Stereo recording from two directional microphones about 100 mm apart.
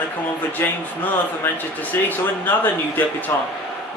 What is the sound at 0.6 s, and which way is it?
Speech, 20° left (ahead or behind).